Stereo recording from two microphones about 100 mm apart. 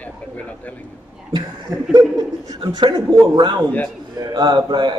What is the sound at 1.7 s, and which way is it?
Speech, 25° right (ahead or behind).